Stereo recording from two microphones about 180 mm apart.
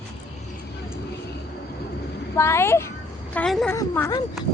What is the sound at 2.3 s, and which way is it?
A woman's voice, 15° left (ahead or behind).